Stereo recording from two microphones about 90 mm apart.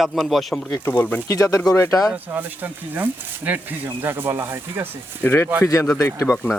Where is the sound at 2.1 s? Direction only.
20° right (ahead or behind).